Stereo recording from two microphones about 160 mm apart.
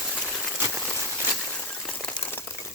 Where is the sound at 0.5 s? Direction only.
15° right (ahead or behind).